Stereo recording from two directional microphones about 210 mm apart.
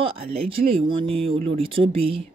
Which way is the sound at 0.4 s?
25° right (ahead or behind).